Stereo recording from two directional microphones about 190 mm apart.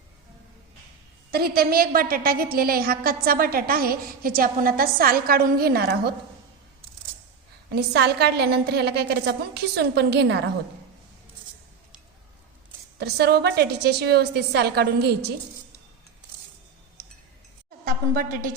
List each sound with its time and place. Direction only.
1.3 s a woman's voice: 55° right (ahead or behind)
7.8 s a woman's voice: 60° right (ahead or behind)
13.0 s a woman's voice: 60° right (ahead or behind)
18.1 s a woman's voice: 45° right (ahead or behind)